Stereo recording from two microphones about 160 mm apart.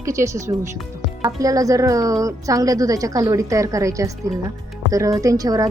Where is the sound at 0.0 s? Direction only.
20° right (ahead or behind).